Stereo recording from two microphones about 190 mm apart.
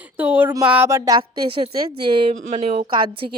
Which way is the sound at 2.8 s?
25° right (ahead or behind).